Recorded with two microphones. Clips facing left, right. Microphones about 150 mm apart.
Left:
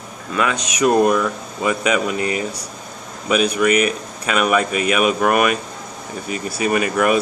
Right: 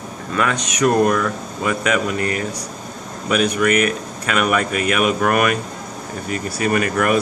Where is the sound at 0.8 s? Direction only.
15° left (ahead or behind).